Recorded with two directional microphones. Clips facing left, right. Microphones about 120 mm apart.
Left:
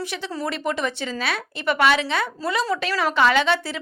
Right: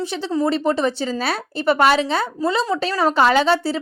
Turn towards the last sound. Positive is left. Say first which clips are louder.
# right 4 dB
turn(degrees=-35)  # may be behind; listen again after turning